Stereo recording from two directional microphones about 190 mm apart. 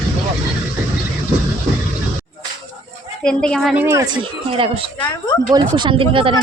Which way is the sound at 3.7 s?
15° right (ahead or behind).